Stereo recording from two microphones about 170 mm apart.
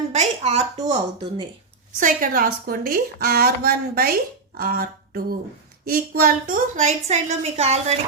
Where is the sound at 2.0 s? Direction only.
55° right (ahead or behind).